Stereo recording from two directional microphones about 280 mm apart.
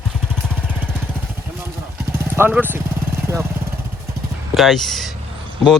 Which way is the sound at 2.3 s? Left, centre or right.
Centre.